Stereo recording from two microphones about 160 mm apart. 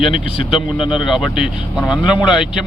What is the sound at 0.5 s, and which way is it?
Speech, 35° left (ahead or behind).